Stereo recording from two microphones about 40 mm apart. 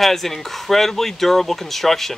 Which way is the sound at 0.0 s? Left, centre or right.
Centre.